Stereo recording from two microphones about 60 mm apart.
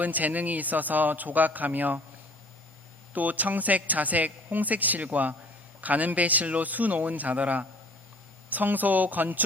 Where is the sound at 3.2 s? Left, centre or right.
Right.